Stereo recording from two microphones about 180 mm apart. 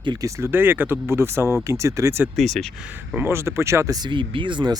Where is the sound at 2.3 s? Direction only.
Centre (ahead or behind).